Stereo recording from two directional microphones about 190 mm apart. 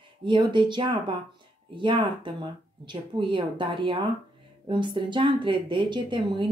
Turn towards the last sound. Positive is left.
turn(degrees=-25)  # may be behind; listen again after turning